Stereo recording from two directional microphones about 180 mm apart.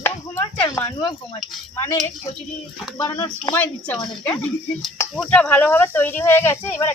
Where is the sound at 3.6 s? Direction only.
10° left (ahead or behind).